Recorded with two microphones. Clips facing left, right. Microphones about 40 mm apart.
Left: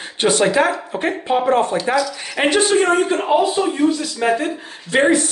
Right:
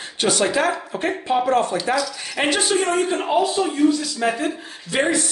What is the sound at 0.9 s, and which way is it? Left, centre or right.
Speech, centre.